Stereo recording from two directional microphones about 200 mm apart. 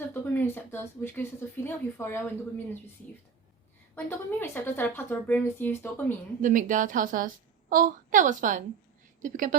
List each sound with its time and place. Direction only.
0.1 s speech: 10° left (ahead or behind)
3.9 s speech: 10° left (ahead or behind)
6.4 s a woman's voice: 40° right (ahead or behind)